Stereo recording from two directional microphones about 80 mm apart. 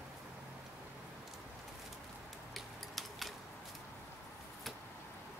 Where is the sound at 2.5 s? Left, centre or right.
Centre.